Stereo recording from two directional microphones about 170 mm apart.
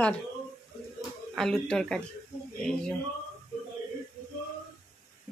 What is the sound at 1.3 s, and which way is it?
Speech, 5° left (ahead or behind).